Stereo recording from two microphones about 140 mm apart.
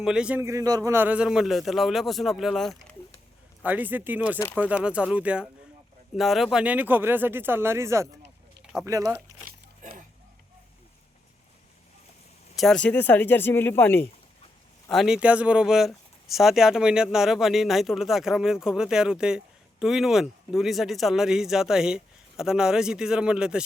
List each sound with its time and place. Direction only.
0.0 s speech: 5° right (ahead or behind)
0.4 s speech: 25° right (ahead or behind); by 2.7 s centre (ahead or behind)
3.6 s speech: 10° right (ahead or behind)
9.5 s a sound: 90° right
12.5 s speech: 5° left (ahead or behind)
14.8 s speech: centre (ahead or behind)